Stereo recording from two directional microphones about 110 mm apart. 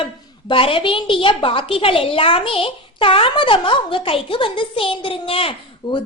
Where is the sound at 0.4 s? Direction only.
55° left (ahead or behind).